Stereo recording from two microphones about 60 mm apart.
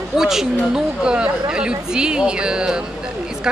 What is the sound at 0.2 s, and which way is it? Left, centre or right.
Speech, centre.